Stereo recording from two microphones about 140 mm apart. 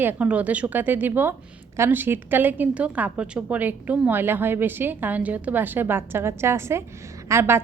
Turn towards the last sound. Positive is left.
turn(degrees=-15)  # may be behind; listen again after turning